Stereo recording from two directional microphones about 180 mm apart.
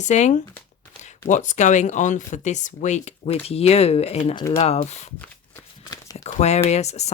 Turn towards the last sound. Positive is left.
turn(degrees=35)  # may be behind; listen again after turning